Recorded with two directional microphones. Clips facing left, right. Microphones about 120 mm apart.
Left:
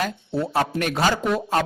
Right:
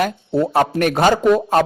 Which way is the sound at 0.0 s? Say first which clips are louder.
Right 7 dB; 55° right (ahead or behind).